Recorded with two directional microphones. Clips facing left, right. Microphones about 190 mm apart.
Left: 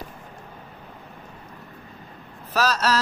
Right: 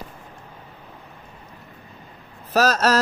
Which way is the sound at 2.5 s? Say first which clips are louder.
Right 4 dB; 45° right (ahead or behind).